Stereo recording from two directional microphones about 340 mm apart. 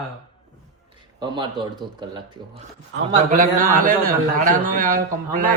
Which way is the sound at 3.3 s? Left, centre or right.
Right.